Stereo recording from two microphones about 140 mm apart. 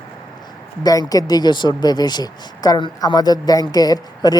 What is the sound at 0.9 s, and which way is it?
Speech, 25° left (ahead or behind).